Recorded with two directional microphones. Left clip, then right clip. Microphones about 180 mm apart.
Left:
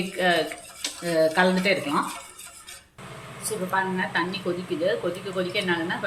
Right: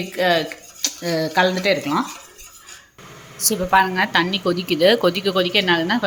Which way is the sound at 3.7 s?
70° right (ahead or behind).